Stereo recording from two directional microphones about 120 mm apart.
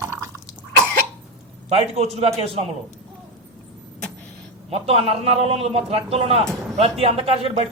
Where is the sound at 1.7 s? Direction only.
55° right (ahead or behind).